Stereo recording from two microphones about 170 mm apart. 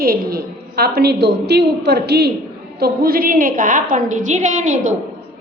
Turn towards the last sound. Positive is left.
turn(degrees=-45)  # may be behind; listen again after turning